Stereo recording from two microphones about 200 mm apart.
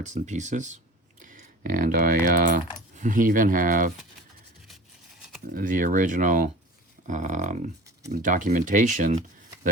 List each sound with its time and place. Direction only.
0.0 s speech: 35° right (ahead or behind)
5.5 s speech: 40° right (ahead or behind)